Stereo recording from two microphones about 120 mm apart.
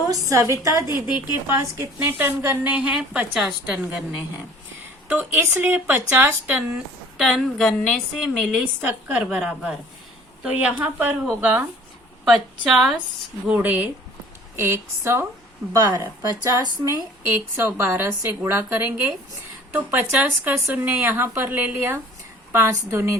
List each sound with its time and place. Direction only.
0.1 s a woman's voice: 25° right (ahead or behind)
2.7 s speech: 10° right (ahead or behind)
7.2 s a woman's voice: centre (ahead or behind)
8.6 s a woman's voice: 15° right (ahead or behind)
12.2 s a woman's voice: centre (ahead or behind)
13.5 s a woman's voice: 15° right (ahead or behind)
17.6 s a woman's voice: 15° right (ahead or behind)